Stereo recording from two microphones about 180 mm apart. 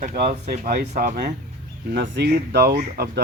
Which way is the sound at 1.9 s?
70° right (ahead or behind).